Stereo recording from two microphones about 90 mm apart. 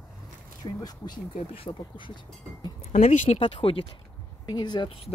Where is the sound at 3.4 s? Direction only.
80° left.